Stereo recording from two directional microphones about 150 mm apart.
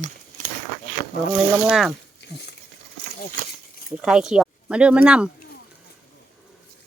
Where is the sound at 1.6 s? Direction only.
Centre (ahead or behind).